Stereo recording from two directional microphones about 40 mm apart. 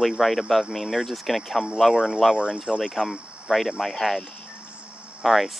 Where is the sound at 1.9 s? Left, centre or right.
Right.